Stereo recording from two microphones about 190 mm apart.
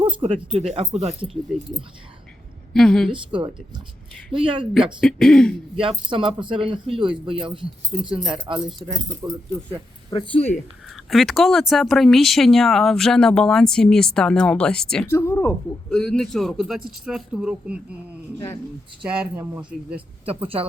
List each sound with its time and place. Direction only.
0.0 s speech: 25° right (ahead or behind)
2.7 s speech: 5° left (ahead or behind)
3.1 s speech: 25° right (ahead or behind)
4.7 s speech: centre (ahead or behind)
5.7 s speech: 30° right (ahead or behind)
9.2 s speech: 10° right (ahead or behind)
10.1 s speech: 25° left (ahead or behind)
10.8 s speech: centre (ahead or behind)
20.2 s speech: 30° right (ahead or behind)